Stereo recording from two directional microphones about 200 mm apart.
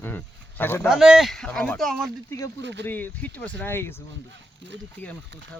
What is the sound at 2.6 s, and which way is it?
Speech, 60° right (ahead or behind).